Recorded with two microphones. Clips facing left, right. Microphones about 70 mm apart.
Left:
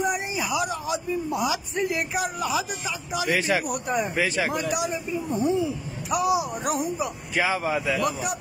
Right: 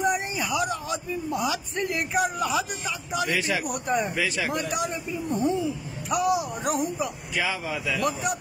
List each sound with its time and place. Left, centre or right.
0.0 s a man's voice: centre
3.3 s speech: left
3.6 s speech: centre
4.1 s speech: left
4.5 s speech: centre
7.3 s speech: left
7.9 s speech: centre